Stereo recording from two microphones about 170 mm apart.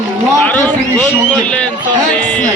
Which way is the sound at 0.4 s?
5° left (ahead or behind).